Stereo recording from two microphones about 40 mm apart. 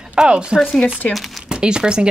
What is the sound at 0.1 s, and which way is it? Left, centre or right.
Speech, right.